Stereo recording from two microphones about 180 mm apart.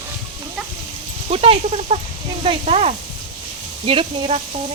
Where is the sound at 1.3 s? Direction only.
30° right (ahead or behind).